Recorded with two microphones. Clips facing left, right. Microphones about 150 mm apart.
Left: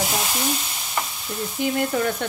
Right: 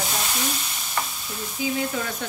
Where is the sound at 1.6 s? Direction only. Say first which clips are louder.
Left 3 dB; 60° left (ahead or behind).